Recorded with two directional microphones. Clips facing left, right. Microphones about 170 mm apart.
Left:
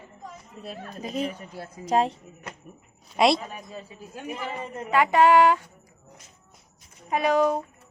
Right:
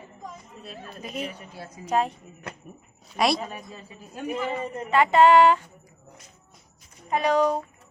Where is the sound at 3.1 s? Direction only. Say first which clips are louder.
Left 3 dB; 25° left (ahead or behind).